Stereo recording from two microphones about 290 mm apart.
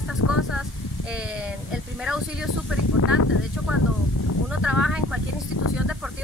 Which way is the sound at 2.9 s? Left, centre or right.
Left.